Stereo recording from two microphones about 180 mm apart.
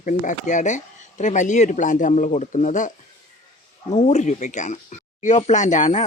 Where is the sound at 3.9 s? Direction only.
40° left (ahead or behind).